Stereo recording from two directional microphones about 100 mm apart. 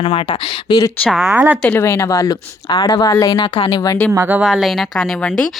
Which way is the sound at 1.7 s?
25° left (ahead or behind).